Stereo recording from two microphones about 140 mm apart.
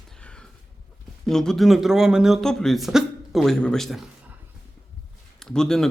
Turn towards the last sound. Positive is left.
turn(degrees=5)  # may be behind; listen again after turning